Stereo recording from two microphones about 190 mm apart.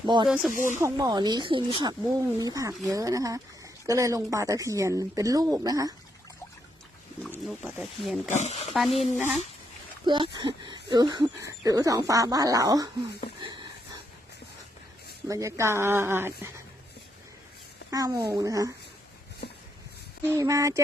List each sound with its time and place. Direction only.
0.1 s speech: 25° right (ahead or behind)
7.4 s speech: centre (ahead or behind)
8.3 s speech: 35° left (ahead or behind)
8.7 s speech: centre (ahead or behind)
10.1 s speech: 25° right (ahead or behind)
13.4 s a sound: 25° right (ahead or behind)
15.3 s speech: 15° right (ahead or behind)
17.9 s speech: 20° right (ahead or behind)
20.2 s speech: 15° right (ahead or behind)